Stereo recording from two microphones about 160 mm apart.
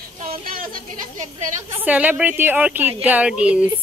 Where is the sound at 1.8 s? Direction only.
10° right (ahead or behind).